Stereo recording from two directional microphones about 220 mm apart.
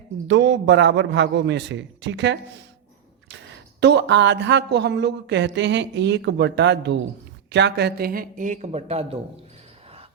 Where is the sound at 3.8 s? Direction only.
50° right (ahead or behind); by 9.2 s 30° right (ahead or behind).